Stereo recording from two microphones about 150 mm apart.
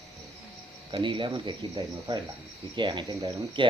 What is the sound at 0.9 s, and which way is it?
Speech, 35° right (ahead or behind).